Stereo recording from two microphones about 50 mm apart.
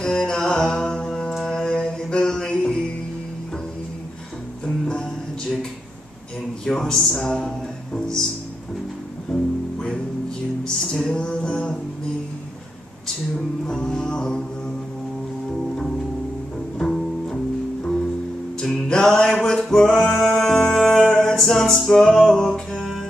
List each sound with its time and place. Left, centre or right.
0.0 s music: centre
1.4 s mantra: centre
4.6 s music: centre
6.6 s a sound: centre
7.2 s music: centre
9.3 s music: centre
13.7 s music: centre
16.7 s music: centre
18.6 s music: centre
19.4 s singing: centre